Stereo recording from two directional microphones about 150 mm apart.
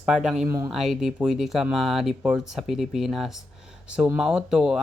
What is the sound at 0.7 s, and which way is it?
Speech, centre (ahead or behind).